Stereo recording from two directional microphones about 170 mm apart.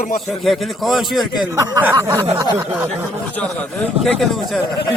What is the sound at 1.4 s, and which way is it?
Speech, 15° right (ahead or behind).